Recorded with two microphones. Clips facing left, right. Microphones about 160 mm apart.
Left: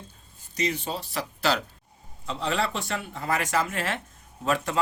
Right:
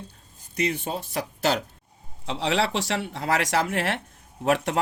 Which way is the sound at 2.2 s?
80° right.